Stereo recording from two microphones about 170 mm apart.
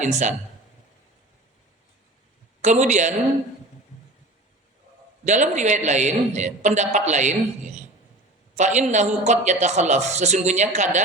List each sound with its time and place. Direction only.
0.0 s a man's voice: 45° right (ahead or behind)
2.6 s a man's voice: 45° right (ahead or behind)
5.2 s a man's voice: 45° right (ahead or behind)